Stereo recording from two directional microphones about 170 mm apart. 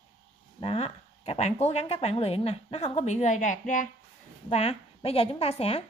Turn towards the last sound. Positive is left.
turn(degrees=35)  # may be behind; listen again after turning